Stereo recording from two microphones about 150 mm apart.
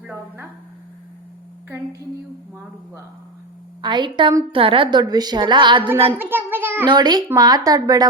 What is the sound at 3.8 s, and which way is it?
A woman's voice, 30° right (ahead or behind).